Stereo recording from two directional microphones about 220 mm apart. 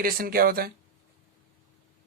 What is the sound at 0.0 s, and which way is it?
Speech, 40° right (ahead or behind).